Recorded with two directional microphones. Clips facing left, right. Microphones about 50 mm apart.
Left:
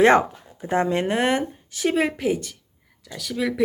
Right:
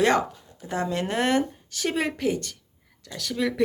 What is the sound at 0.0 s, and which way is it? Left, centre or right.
Speech, left.